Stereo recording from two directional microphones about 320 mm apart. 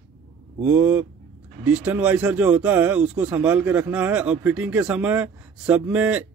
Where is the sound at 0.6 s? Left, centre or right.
Centre.